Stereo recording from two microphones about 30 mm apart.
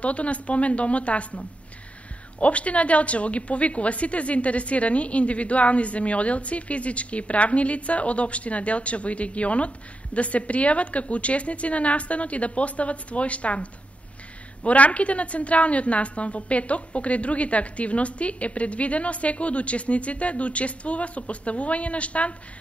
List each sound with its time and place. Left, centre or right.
0.0 s a woman's voice: left
2.4 s a woman's voice: left